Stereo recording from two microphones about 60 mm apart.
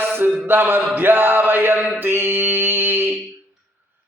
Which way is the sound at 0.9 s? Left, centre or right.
Right.